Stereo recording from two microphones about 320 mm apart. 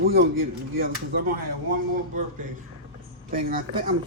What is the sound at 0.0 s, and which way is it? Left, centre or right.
Speech, right.